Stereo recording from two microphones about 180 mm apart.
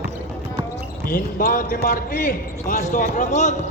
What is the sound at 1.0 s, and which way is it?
Basketball bounce, 50° left (ahead or behind).